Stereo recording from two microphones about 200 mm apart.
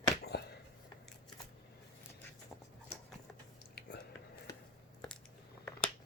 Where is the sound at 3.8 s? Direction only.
55° left (ahead or behind).